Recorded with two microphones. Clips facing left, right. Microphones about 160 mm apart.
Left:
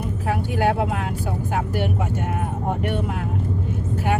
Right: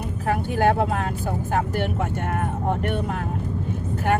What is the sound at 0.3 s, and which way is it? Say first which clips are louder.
Speech: right 1 dB; 45° right (ahead or behind).